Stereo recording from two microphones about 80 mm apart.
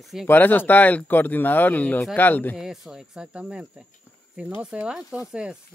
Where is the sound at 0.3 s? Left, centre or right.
Left.